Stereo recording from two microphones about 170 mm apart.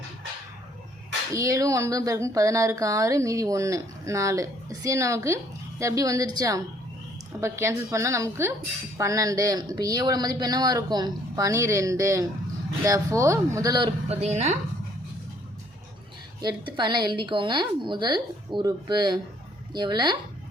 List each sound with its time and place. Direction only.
1.3 s a woman's voice: 20° right (ahead or behind)
14.1 s a woman's voice: 40° right (ahead or behind)
16.4 s speech: 25° right (ahead or behind)